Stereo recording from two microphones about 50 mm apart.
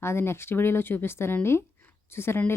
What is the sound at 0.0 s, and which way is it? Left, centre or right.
Speech, left.